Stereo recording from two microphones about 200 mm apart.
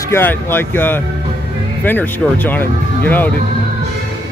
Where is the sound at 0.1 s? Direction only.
10° left (ahead or behind).